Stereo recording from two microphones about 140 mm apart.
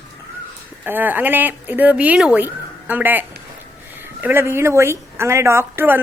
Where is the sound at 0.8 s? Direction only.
15° right (ahead or behind).